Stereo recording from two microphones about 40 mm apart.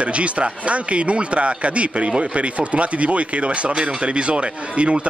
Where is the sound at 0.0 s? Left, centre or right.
Right.